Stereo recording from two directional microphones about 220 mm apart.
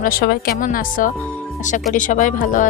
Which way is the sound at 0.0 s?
45° left (ahead or behind).